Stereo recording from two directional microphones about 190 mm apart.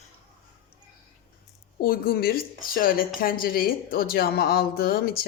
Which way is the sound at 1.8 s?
50° left (ahead or behind).